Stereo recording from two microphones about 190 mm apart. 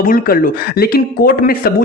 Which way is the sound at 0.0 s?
45° left (ahead or behind).